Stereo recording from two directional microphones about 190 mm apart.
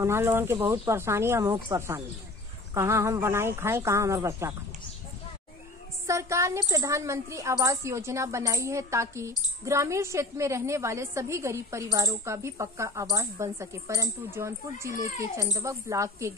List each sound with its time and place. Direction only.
0.0 s a woman's voice: 15° right (ahead or behind)
6.0 s a woman's voice: 15° right (ahead or behind)